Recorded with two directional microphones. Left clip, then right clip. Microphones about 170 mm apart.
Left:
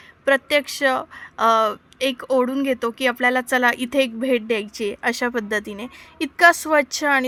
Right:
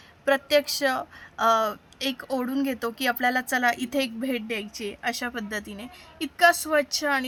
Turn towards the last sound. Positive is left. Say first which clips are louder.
# left 6 dB
turn(degrees=30)  # may be behind; listen again after turning